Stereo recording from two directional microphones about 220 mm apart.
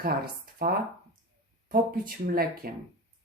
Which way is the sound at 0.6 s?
45° right (ahead or behind).